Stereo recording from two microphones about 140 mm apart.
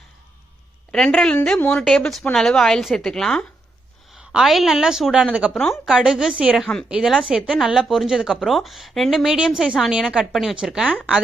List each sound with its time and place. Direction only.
0.9 s a woman's voice: 5° left (ahead or behind)